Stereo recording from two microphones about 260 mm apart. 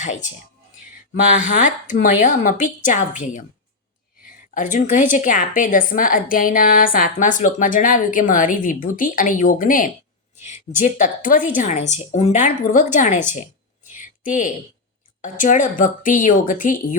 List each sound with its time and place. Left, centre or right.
1.3 s speech: left
4.5 s a woman's voice: left
13.9 s a sound: left
15.2 s a woman's voice: left